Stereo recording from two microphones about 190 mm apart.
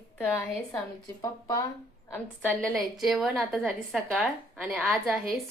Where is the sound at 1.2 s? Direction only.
15° left (ahead or behind).